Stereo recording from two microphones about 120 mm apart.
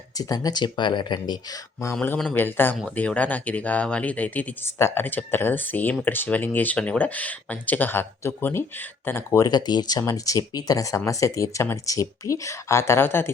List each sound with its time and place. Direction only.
0.2 s speech: 30° left (ahead or behind)
2.0 s speech: 10° left (ahead or behind)